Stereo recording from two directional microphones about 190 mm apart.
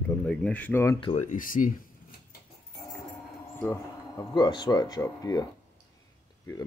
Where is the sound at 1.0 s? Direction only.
35° left (ahead or behind).